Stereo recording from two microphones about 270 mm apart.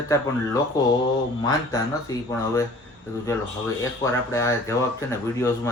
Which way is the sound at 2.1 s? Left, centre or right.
Centre.